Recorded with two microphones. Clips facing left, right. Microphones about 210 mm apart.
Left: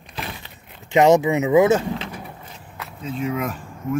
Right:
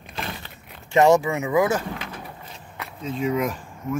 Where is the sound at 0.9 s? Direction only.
20° left (ahead or behind).